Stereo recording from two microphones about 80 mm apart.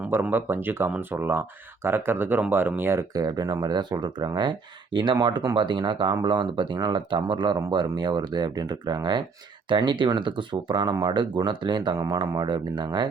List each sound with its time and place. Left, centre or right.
0.1 s speech: right
3.2 s speech: right
9.6 s speech: right